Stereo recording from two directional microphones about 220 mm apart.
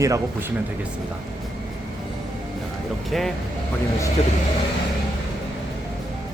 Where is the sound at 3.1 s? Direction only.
Centre (ahead or behind).